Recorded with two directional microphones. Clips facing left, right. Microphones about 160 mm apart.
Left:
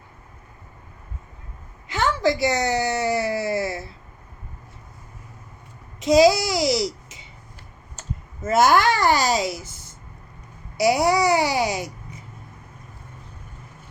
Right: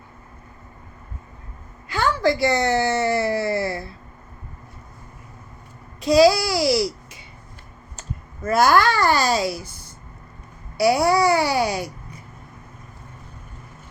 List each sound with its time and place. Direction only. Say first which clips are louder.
1.9 s a sound: right 1 dB; 20° left (ahead or behind)
6.0 s a child's voice: even; 20° left (ahead or behind)
8.4 s a child's voice: even; 20° left (ahead or behind)
10.8 s a child's voice: right 1 dB; 20° left (ahead or behind)